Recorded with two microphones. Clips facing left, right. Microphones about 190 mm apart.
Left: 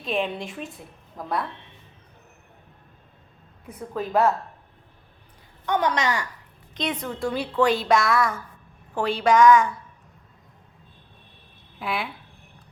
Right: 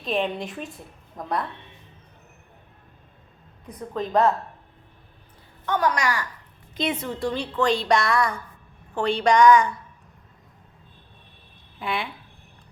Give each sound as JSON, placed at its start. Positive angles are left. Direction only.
{"t": 0.0, "sound": "a woman's voice", "side_deg": 0}
{"t": 3.7, "sound": "a woman's voice", "side_deg": 10}
{"t": 5.6, "sound": "a woman's voice", "side_deg": 20}
{"t": 6.7, "sound": "a woman's voice", "side_deg": -5}
{"t": 11.8, "sound": "a woman's voice", "side_deg": 0}